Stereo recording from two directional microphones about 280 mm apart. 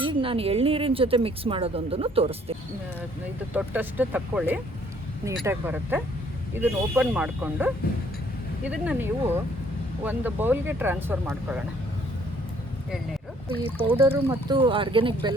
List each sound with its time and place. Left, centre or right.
0.0 s speech: centre
3.5 s speech: centre
13.7 s speech: centre